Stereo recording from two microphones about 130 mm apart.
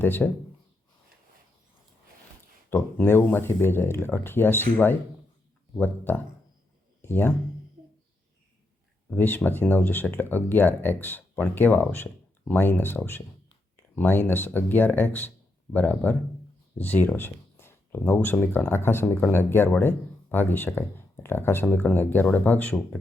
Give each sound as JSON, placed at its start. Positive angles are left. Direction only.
{"t": 0.0, "sound": "speech", "side_deg": 15}
{"t": 2.6, "sound": "speech", "side_deg": 15}
{"t": 9.0, "sound": "speech", "side_deg": 15}